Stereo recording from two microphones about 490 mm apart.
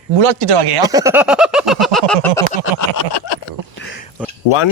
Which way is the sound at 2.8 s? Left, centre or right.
Left.